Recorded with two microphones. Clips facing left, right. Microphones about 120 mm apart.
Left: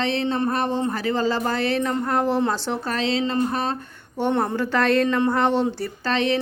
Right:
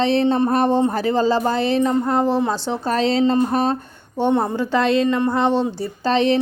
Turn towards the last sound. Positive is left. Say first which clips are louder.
# right 5 dB
turn(degrees=-30)  # may be behind; listen again after turning